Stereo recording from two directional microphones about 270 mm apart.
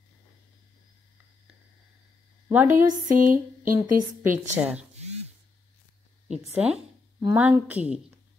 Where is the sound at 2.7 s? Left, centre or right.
Right.